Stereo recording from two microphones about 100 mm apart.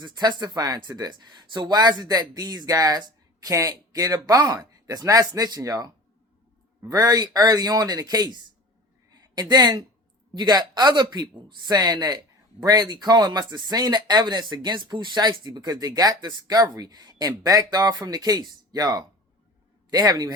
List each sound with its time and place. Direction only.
0.0 s speech: 45° right (ahead or behind)